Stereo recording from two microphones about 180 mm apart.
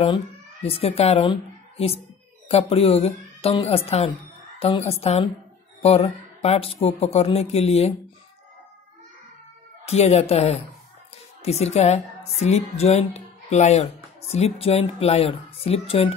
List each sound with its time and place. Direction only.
0.7 s speech: 35° left (ahead or behind)
9.8 s speech: 35° left (ahead or behind)